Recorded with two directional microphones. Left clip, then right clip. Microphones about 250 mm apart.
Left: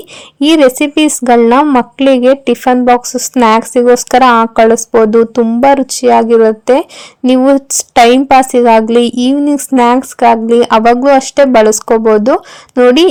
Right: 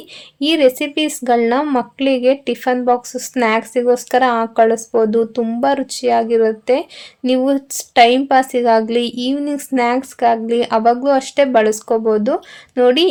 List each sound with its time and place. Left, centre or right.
0.4 s a woman's voice: left